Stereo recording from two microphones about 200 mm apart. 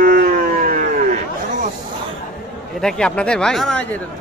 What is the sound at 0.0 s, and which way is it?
Howl, 45° right (ahead or behind).